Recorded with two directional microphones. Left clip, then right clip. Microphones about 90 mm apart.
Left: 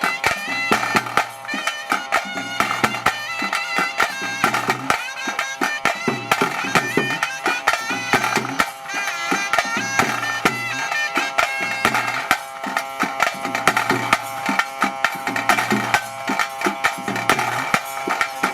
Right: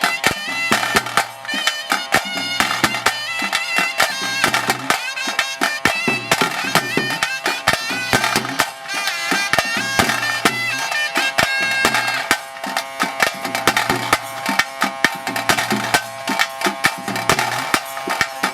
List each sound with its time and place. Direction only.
0.0 s music: 25° right (ahead or behind)